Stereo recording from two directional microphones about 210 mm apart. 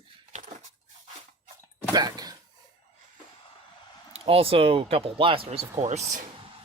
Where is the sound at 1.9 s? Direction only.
20° right (ahead or behind).